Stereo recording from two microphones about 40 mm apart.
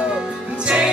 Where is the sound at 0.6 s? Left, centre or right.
Right.